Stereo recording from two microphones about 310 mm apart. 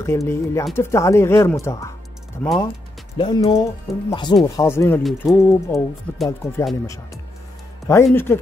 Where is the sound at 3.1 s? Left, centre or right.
Centre.